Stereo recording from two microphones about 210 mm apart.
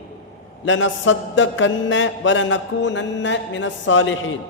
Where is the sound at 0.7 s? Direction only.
65° left (ahead or behind).